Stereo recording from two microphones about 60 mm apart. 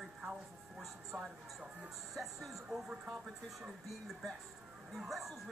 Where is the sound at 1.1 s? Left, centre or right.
Centre.